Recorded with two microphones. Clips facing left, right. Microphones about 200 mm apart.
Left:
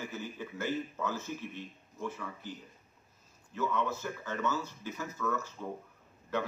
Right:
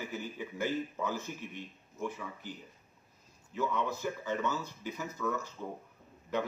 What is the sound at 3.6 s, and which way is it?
A man's voice, 15° right (ahead or behind).